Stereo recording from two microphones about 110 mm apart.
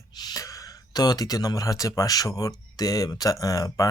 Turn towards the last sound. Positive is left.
turn(degrees=30)  # may be behind; listen again after turning